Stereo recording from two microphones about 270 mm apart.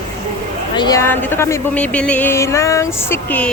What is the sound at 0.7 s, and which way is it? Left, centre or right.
Speech, centre.